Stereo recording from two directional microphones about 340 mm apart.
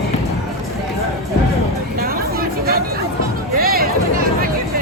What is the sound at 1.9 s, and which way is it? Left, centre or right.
Chatter, right.